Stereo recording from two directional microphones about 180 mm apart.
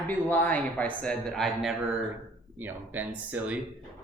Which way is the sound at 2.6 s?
10° right (ahead or behind).